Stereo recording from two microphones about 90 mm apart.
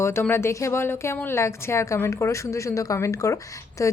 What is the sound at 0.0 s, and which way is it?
A woman's voice, 30° left (ahead or behind).